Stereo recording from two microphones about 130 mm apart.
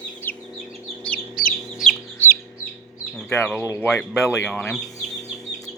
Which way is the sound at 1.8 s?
Centre (ahead or behind).